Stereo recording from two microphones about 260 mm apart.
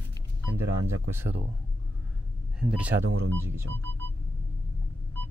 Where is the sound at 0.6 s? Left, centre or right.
Right.